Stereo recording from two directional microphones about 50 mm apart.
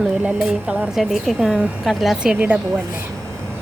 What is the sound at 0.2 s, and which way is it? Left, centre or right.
Speech, right.